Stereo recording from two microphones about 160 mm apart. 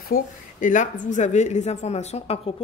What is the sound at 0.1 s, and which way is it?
Speech, 55° left (ahead or behind).